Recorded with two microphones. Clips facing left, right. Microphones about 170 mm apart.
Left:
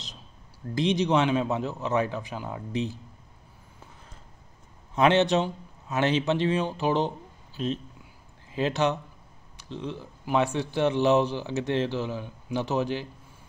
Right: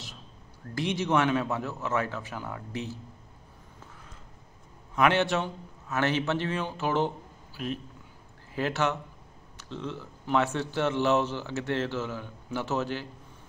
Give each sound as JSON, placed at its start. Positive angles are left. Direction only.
{"t": 0.7, "sound": "speech", "side_deg": 20}
{"t": 4.9, "sound": "speech", "side_deg": 25}